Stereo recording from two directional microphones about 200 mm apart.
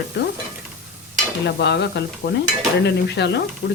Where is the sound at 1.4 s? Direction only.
60° left (ahead or behind).